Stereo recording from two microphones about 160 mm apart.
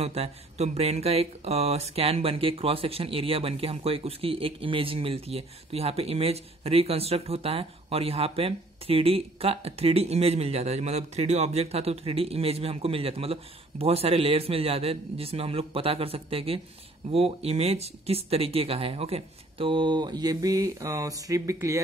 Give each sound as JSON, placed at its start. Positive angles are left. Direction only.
{"t": 0.0, "sound": "speech", "side_deg": -40}